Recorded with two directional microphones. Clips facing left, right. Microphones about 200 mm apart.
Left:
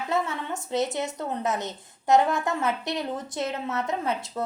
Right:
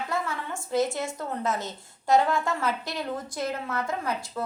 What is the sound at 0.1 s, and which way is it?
A woman's voice, 20° left (ahead or behind).